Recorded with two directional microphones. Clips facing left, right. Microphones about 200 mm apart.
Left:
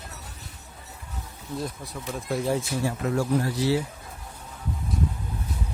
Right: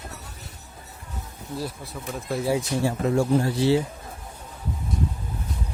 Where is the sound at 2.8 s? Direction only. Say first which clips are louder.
Right 5 dB; 25° right (ahead or behind).